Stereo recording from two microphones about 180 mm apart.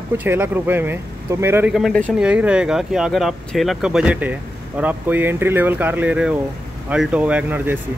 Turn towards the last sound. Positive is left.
turn(degrees=-10)  # may be behind; listen again after turning